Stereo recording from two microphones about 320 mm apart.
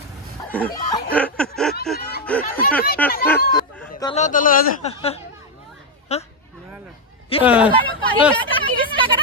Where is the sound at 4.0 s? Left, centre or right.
Centre.